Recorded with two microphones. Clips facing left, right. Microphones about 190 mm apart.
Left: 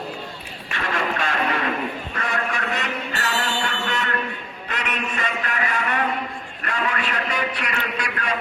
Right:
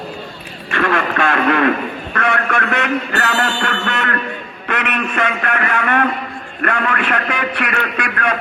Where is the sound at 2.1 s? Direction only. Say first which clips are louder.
Right 11 dB; 85° right.